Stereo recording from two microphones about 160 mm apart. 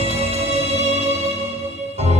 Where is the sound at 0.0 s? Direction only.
40° right (ahead or behind).